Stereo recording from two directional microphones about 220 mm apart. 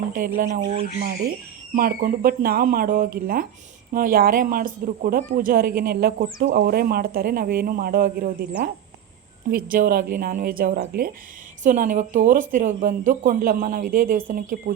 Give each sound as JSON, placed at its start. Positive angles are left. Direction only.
{"t": 0.3, "sound": "speech", "side_deg": -40}